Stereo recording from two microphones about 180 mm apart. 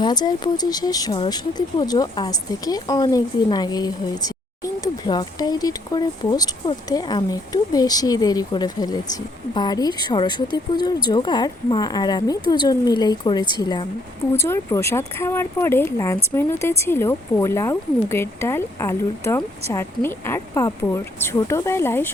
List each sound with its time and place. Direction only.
0.0 s a woman's voice: 20° left (ahead or behind)